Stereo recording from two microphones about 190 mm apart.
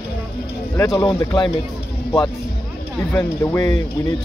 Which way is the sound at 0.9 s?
25° left (ahead or behind).